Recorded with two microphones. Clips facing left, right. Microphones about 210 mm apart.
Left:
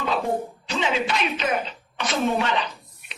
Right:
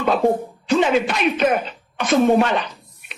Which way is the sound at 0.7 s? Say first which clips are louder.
Right 8 dB; 55° right (ahead or behind).